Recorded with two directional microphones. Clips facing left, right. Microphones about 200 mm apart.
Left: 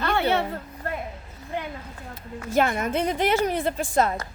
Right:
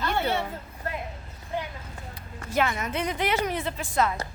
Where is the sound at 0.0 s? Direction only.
65° left (ahead or behind).